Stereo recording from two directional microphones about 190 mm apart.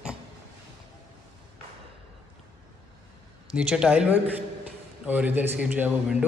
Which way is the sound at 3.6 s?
5° right (ahead or behind).